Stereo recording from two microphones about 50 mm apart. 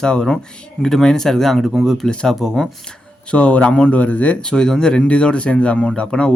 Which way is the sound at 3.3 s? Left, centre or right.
Left.